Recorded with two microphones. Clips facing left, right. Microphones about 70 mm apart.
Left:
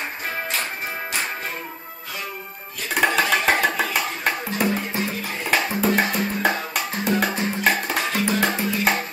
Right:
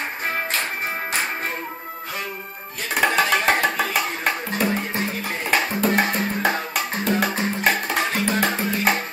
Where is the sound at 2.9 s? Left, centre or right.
Centre.